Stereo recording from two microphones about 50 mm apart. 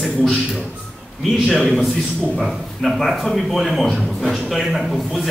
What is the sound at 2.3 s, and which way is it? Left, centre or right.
A man's voice, centre.